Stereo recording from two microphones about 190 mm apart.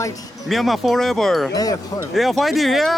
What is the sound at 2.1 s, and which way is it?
Speech, centre (ahead or behind).